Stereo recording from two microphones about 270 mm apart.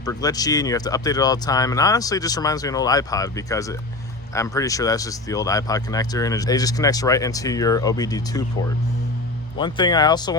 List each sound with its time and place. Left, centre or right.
0.0 s speech: centre
9.6 s speech: centre